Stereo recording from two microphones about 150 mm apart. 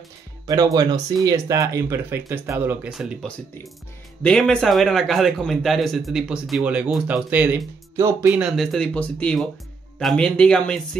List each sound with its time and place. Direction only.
0.5 s speech: 25° right (ahead or behind)
2.9 s a man's voice: centre (ahead or behind)